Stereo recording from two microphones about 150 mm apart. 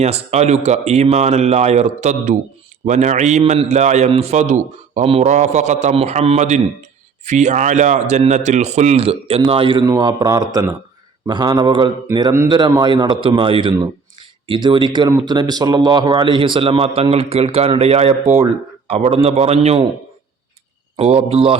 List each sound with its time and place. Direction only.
0.0 s a man's voice: 45° right (ahead or behind)
20.9 s speech: 40° right (ahead or behind)